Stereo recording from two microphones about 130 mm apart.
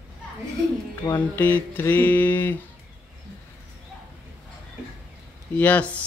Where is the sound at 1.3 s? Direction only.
15° left (ahead or behind).